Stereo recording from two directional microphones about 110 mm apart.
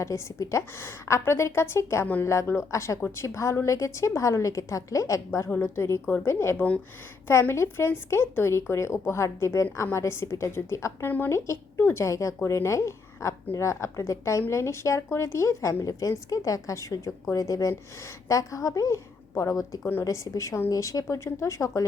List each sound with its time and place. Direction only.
0.0 s a woman's voice: 25° left (ahead or behind)
5.5 s a woman's voice: 20° left (ahead or behind)